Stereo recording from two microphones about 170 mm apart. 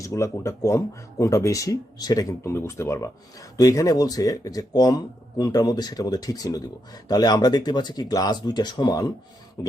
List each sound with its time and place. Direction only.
0.0 s speech: 20° left (ahead or behind)